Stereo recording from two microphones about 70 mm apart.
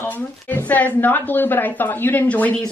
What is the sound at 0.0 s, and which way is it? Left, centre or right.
Speech, left.